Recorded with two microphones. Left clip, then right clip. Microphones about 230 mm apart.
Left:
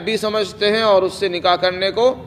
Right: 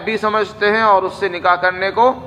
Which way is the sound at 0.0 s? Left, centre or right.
Left.